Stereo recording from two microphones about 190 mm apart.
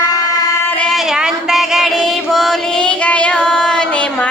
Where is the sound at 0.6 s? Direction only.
5° left (ahead or behind).